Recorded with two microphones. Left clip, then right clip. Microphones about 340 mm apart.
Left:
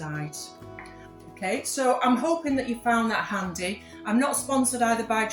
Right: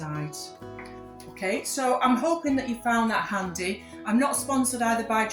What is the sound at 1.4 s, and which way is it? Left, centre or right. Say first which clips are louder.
A woman's voice: even; right.